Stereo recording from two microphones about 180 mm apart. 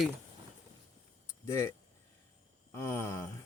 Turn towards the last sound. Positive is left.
turn(degrees=10)  # may be behind; listen again after turning